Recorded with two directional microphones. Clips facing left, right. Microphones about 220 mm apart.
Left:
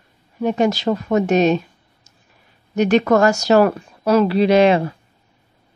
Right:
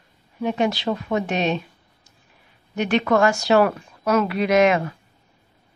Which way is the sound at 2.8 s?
40° left (ahead or behind).